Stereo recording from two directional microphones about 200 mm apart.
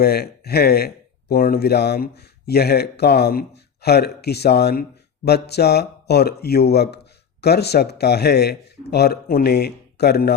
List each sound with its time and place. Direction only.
0.0 s speech: 50° left (ahead or behind)